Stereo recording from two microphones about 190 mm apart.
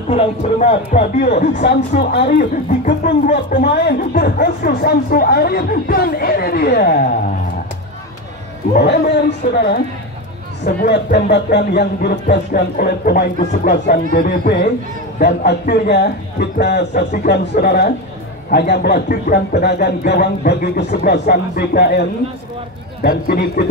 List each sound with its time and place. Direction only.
0.1 s speech: 35° left (ahead or behind)
1.5 s a man's voice: 65° left (ahead or behind)
3.6 s speech: 60° left (ahead or behind)
8.7 s a man's voice: 60° left (ahead or behind)
10.9 s a man's voice: 60° left (ahead or behind)
13.4 s speech: 40° left (ahead or behind)
14.1 s a man's voice: 55° left (ahead or behind)
23.0 s speech: 55° left (ahead or behind)